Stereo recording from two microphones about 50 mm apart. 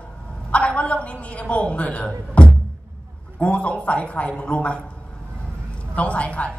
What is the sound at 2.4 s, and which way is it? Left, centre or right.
Music, left.